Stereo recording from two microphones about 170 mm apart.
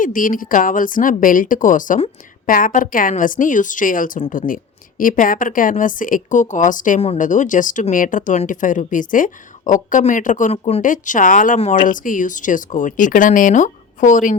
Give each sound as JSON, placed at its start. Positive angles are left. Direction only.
{"t": 0.0, "sound": "a woman's voice", "side_deg": 50}